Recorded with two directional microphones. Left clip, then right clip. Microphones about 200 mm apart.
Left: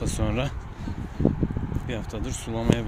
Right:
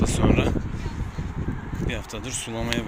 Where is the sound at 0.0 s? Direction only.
25° left (ahead or behind).